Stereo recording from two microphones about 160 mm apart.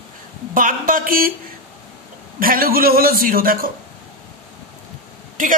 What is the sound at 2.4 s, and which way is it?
A man's voice, 65° right (ahead or behind).